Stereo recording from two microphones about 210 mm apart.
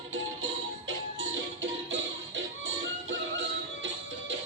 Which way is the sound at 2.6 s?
60° right (ahead or behind).